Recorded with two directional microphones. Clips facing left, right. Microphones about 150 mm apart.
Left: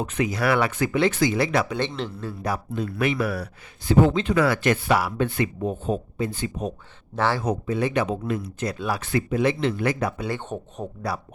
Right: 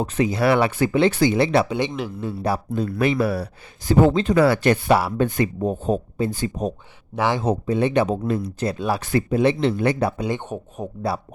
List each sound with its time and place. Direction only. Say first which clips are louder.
0.0 s speech: right 4 dB; 35° right (ahead or behind)
1.8 s speech: right 3 dB; 10° right (ahead or behind)
2.3 s speech: right 6 dB; 30° right (ahead or behind)
7.2 s speech: right 2 dB; 15° right (ahead or behind)
7.4 s speech: right 4 dB; 30° right (ahead or behind)
10.2 s speech: right 3 dB; 20° right (ahead or behind)
11.1 s speech: right 4 dB; 25° right (ahead or behind)